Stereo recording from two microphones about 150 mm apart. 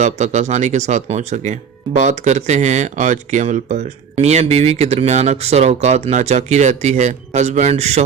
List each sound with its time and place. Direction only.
0.0 s speech: 50° right (ahead or behind)